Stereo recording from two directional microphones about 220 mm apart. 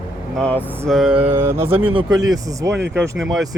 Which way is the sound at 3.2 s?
Centre (ahead or behind).